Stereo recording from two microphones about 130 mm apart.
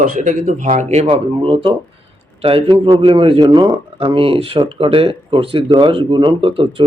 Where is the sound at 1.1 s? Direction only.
40° right (ahead or behind).